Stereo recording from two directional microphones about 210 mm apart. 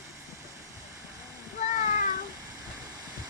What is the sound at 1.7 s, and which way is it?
Cat, 35° left (ahead or behind).